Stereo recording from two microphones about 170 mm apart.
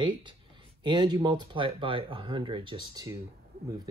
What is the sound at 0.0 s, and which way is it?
Speech, 25° right (ahead or behind).